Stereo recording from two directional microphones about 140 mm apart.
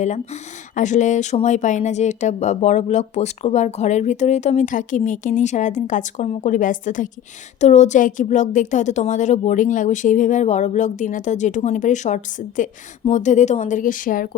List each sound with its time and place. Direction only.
0.8 s speech: 60° left (ahead or behind); by 14.3 s 75° left (ahead or behind)